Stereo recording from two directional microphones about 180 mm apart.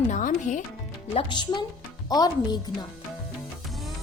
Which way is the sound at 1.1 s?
30° left (ahead or behind).